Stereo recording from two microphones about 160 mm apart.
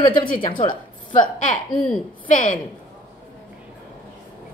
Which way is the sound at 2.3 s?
55° left (ahead or behind).